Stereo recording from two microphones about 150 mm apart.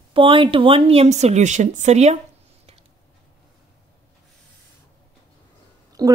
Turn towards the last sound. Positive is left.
turn(degrees=-25)  # may be behind; listen again after turning